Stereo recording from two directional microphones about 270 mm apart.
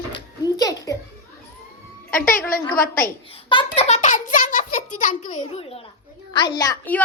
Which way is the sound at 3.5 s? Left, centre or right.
Centre.